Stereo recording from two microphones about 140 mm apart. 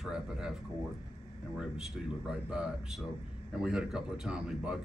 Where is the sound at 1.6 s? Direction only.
5° right (ahead or behind).